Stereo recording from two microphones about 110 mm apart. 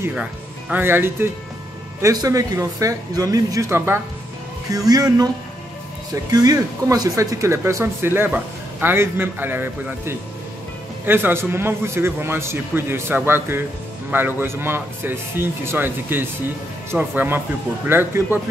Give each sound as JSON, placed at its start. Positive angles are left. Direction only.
{"t": 0.1, "sound": "speech", "side_deg": -10}
{"t": 4.6, "sound": "speech", "side_deg": -35}
{"t": 6.3, "sound": "speech", "side_deg": -35}